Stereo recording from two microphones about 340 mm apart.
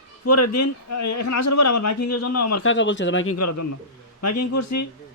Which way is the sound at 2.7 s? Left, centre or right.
Left.